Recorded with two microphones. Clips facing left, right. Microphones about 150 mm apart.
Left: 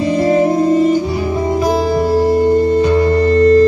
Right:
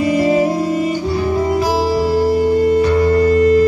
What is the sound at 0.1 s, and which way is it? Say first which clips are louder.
Music: left 3 dB; 10° right (ahead or behind).